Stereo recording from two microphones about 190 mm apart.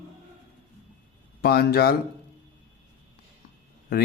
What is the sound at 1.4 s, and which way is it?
Speech, 55° left (ahead or behind).